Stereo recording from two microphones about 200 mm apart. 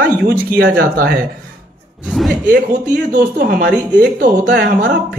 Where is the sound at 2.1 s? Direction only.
Centre (ahead or behind).